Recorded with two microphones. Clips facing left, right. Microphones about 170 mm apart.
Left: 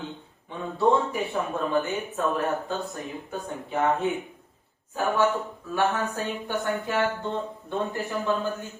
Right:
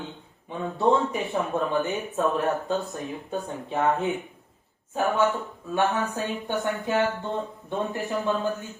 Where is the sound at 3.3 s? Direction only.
20° right (ahead or behind).